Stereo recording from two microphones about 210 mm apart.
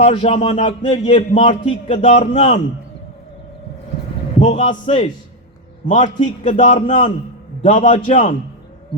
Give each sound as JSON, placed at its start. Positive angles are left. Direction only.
{"t": 0.0, "sound": "speech", "side_deg": 30}
{"t": 4.4, "sound": "a man's voice", "side_deg": 30}